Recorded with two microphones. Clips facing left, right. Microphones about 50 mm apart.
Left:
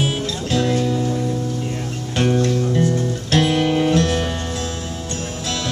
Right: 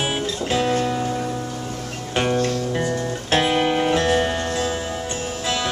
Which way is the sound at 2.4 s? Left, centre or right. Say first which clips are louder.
Left 4 dB; right.